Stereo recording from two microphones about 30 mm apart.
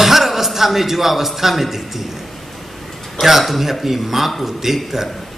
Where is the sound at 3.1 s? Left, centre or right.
Centre.